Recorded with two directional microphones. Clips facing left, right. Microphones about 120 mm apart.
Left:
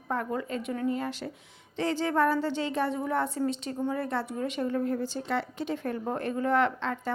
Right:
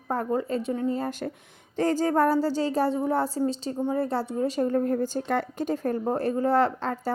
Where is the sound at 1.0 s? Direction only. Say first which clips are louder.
Right 4 dB; 45° right (ahead or behind).